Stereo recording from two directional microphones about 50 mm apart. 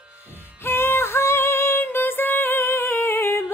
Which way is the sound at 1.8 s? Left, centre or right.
Left.